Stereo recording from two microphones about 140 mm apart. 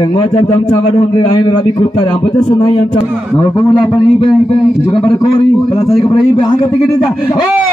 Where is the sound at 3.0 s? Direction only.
5° right (ahead or behind).